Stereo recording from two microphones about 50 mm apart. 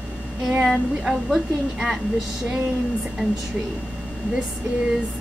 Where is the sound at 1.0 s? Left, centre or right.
Centre.